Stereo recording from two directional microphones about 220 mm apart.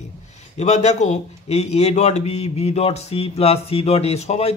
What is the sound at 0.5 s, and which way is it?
Speech, 30° left (ahead or behind).